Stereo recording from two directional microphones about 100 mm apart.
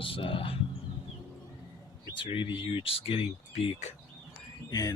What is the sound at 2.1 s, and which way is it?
Speech, 60° left (ahead or behind).